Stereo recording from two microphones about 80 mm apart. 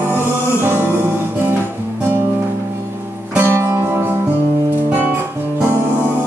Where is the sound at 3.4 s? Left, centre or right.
Right.